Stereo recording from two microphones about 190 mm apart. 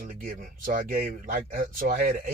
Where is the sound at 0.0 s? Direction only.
45° right (ahead or behind).